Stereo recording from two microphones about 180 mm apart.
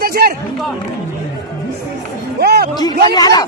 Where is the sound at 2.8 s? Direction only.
20° left (ahead or behind).